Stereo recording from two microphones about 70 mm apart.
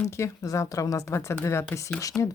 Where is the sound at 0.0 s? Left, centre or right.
Left.